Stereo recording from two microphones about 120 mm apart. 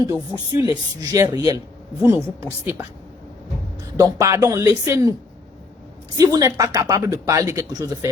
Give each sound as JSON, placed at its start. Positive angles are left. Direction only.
{"t": 0.0, "sound": "speech", "side_deg": -30}
{"t": 2.0, "sound": "a woman's voice", "side_deg": -15}
{"t": 3.9, "sound": "speech", "side_deg": -30}
{"t": 6.1, "sound": "speech", "side_deg": -30}